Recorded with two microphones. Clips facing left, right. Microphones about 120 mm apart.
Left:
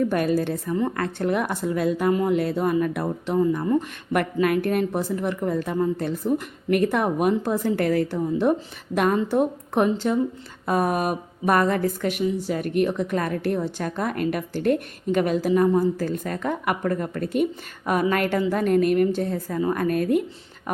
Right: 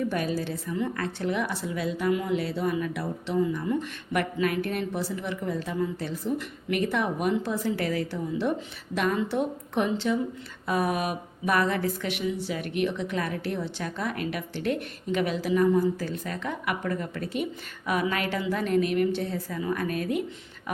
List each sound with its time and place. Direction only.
0.0 s speech: 50° left (ahead or behind)